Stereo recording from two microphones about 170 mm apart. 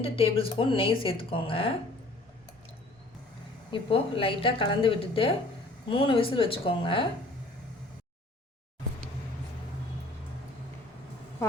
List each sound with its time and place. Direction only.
0.0 s speech: 35° left (ahead or behind)
3.7 s speech: 30° left (ahead or behind)